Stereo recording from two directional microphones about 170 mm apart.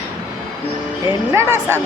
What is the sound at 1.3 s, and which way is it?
Speech, 15° right (ahead or behind).